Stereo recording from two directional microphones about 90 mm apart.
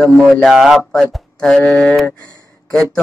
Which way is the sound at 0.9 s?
10° left (ahead or behind).